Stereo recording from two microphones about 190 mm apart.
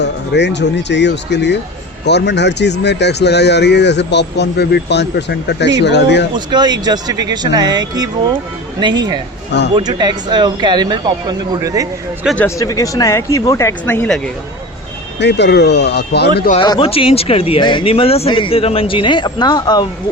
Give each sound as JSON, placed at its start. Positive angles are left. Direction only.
{"t": 0.0, "sound": "speech", "side_deg": 65}
{"t": 6.3, "sound": "speech", "side_deg": -25}
{"t": 12.2, "sound": "speech", "side_deg": 0}
{"t": 12.5, "sound": "speech", "side_deg": 15}
{"t": 15.2, "sound": "speech", "side_deg": 65}
{"t": 16.6, "sound": "speech", "side_deg": 25}